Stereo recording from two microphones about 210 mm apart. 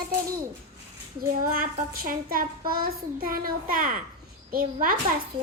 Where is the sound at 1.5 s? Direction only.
45° right (ahead or behind).